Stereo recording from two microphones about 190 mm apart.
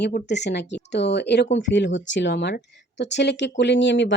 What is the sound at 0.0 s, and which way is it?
Speech, 65° left (ahead or behind).